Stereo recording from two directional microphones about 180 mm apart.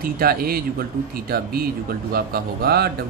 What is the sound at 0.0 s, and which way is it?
Speech, 55° right (ahead or behind).